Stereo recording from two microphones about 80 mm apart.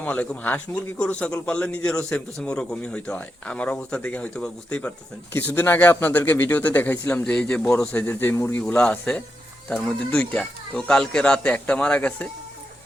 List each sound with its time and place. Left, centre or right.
0.0 s a man's voice: centre
5.5 s speech: left
7.9 s speech: left
9.6 s a man's voice: centre